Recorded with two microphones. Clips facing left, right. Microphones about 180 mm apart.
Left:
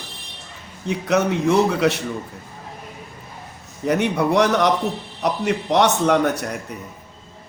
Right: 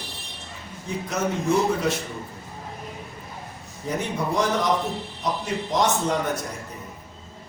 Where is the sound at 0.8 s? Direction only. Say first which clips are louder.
Left 7 dB; 70° left (ahead or behind).